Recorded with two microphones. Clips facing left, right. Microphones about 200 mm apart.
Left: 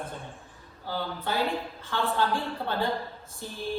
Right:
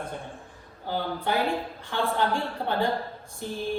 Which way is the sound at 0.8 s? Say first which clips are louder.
Right 3 dB; 15° right (ahead or behind).